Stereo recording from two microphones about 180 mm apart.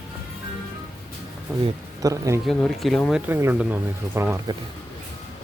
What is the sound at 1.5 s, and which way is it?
Music, 15° right (ahead or behind).